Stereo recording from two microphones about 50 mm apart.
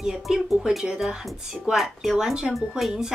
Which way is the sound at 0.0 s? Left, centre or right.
Centre.